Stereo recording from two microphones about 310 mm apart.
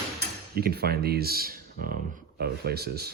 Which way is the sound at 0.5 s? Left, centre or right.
Right.